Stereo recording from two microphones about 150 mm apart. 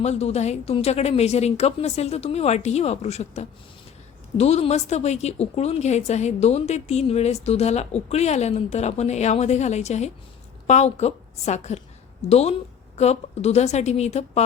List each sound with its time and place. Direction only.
0.0 s a woman's voice: 45° left (ahead or behind)